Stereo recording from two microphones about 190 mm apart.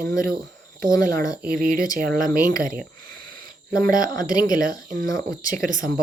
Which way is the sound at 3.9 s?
20° left (ahead or behind).